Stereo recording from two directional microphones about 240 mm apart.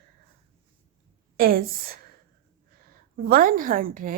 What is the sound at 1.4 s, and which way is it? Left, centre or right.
Speech, right.